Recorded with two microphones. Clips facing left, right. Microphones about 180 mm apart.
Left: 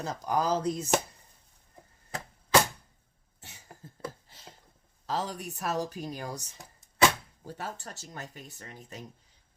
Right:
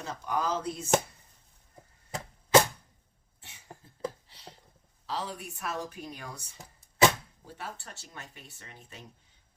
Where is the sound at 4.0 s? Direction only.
45° left (ahead or behind).